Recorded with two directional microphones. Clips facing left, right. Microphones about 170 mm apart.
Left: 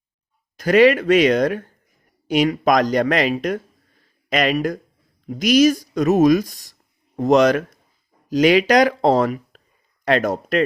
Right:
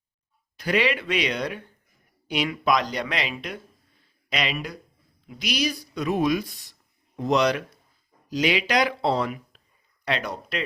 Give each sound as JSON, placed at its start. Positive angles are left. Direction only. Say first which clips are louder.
{"t": 0.5, "sound": "speech", "louder": "left 11 dB", "side_deg": 45}